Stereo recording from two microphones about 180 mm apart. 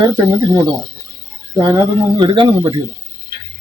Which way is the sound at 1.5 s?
15° right (ahead or behind).